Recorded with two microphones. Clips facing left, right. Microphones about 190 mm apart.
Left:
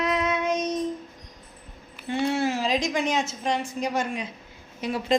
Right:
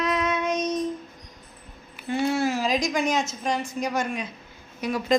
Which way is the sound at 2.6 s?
30° left (ahead or behind).